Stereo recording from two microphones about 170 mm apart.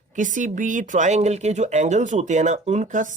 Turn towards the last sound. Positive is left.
turn(degrees=-45)  # may be behind; listen again after turning